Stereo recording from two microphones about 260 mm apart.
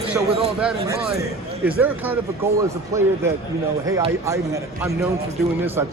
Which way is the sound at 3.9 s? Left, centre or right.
Centre.